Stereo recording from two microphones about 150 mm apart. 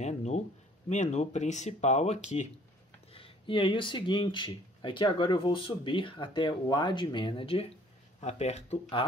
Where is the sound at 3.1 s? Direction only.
40° left (ahead or behind).